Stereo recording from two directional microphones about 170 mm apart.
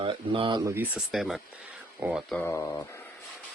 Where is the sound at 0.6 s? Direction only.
10° right (ahead or behind).